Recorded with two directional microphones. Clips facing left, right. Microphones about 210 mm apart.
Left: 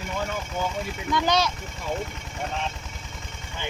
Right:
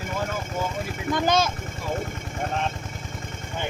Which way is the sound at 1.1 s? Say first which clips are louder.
Right 1 dB; 50° right (ahead or behind).